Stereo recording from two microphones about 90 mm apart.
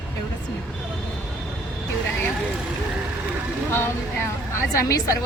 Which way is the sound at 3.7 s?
25° left (ahead or behind).